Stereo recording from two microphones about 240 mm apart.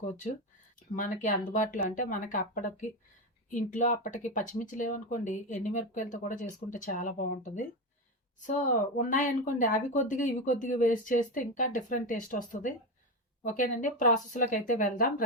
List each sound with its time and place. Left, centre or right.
0.9 s speech: left